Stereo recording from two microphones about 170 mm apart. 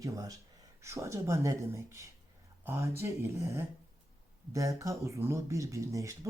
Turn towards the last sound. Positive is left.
turn(degrees=-20)  # may be behind; listen again after turning